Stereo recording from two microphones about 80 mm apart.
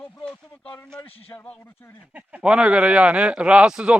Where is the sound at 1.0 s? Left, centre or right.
Left.